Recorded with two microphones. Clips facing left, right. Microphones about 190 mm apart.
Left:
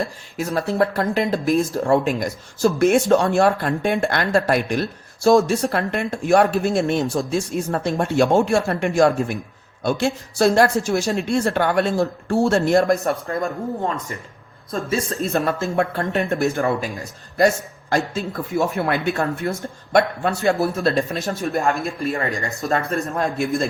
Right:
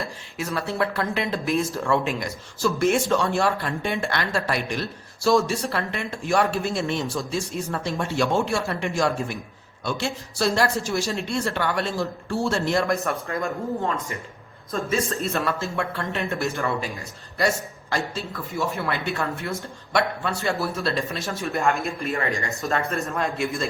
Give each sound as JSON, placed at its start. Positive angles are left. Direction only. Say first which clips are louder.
{"t": 0.3, "sound": "speech", "louder": "left 6 dB", "side_deg": 45}
{"t": 12.9, "sound": "a man's voice", "louder": "left 5 dB", "side_deg": 35}
{"t": 15.2, "sound": "a man's voice", "louder": "left 4 dB", "side_deg": 40}